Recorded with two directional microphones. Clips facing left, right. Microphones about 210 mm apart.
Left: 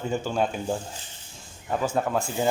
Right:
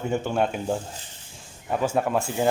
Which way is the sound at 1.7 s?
10° right (ahead or behind).